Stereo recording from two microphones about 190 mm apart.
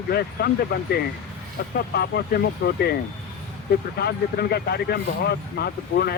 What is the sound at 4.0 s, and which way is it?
Speech, 55° left (ahead or behind).